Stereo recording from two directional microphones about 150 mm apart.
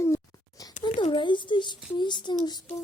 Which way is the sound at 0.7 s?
55° left (ahead or behind).